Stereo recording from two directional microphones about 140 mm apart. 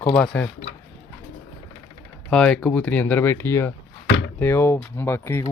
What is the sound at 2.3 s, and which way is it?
Speech, 5° left (ahead or behind).